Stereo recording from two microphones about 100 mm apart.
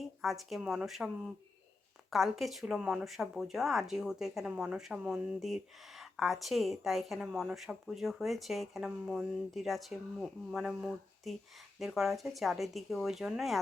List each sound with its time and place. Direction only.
0.2 s speech: centre (ahead or behind)